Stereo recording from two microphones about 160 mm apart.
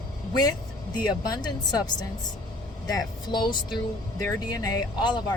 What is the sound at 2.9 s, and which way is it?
Speech, 25° left (ahead or behind).